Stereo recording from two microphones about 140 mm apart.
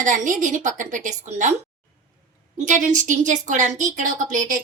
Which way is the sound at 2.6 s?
65° right (ahead or behind).